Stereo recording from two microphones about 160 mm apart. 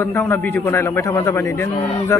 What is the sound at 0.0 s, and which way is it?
A man's voice, 15° left (ahead or behind).